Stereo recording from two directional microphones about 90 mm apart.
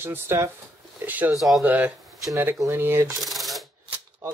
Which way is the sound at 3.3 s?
Centre (ahead or behind).